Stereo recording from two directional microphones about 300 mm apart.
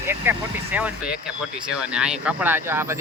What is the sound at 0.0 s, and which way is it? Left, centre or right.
Speech, centre.